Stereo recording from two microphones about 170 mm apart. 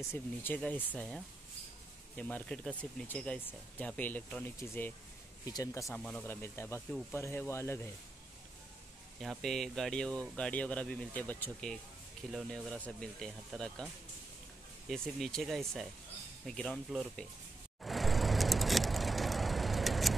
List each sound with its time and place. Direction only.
0.1 s speech: 10° left (ahead or behind)
5.9 s speech: 5° left (ahead or behind)
6.9 s speech: 5° left (ahead or behind)
7.2 s speech: 15° left (ahead or behind)
9.2 s speech: centre (ahead or behind)
14.9 s speech: centre (ahead or behind)
17.8 s vehicle: centre (ahead or behind)